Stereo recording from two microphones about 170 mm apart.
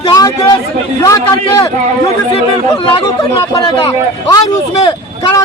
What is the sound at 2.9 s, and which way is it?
Speech, 30° left (ahead or behind).